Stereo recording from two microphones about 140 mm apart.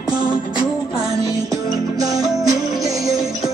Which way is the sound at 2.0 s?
25° right (ahead or behind).